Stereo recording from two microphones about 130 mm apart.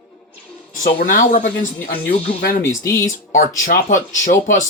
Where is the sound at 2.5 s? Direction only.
90° left.